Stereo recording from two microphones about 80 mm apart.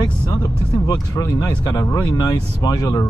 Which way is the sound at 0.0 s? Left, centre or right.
Left.